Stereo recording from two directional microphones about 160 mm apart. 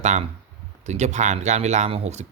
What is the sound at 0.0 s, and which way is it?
Speech, 45° right (ahead or behind).